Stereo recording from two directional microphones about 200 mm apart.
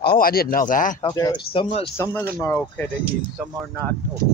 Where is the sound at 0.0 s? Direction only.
50° left (ahead or behind).